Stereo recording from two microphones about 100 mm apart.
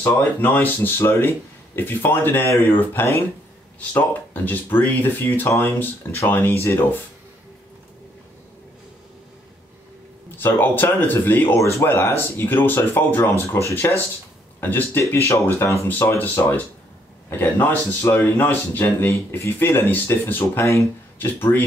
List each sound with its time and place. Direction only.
0.0 s speech: 20° left (ahead or behind)
10.3 s speech: 20° left (ahead or behind)